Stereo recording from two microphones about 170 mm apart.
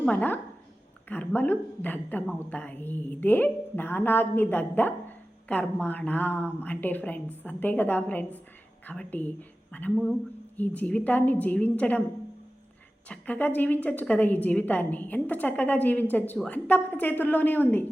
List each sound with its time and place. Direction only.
0.0 s a woman's voice: 10° left (ahead or behind)
13.1 s a woman's voice: 10° left (ahead or behind)